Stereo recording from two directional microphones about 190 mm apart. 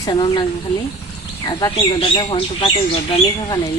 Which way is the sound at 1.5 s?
30° left (ahead or behind).